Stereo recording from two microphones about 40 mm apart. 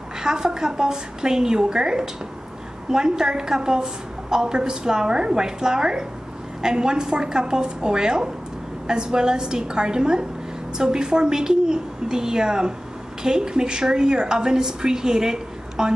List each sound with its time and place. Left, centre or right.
0.2 s a woman's voice: centre